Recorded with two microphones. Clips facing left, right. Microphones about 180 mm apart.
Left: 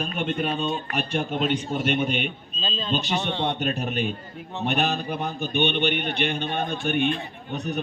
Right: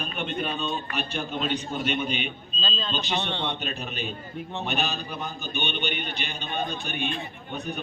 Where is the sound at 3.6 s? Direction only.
45° left (ahead or behind).